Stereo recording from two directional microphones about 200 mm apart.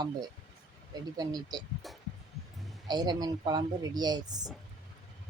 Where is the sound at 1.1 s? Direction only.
20° right (ahead or behind).